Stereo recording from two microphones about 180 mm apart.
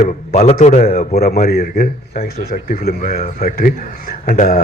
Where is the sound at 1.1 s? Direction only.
60° left (ahead or behind).